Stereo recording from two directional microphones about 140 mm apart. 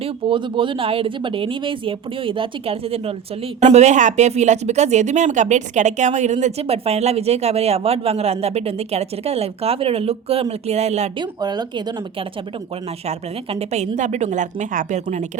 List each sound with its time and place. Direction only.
0.0 s speech: 35° right (ahead or behind)
3.6 s speech: 55° right (ahead or behind)
11.2 s speech: 30° right (ahead or behind)
13.1 s a woman's voice: 50° right (ahead or behind)